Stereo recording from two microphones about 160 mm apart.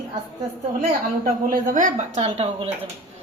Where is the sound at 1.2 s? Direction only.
55° right (ahead or behind).